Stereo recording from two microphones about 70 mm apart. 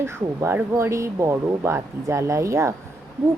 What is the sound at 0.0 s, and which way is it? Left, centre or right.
Speech, right.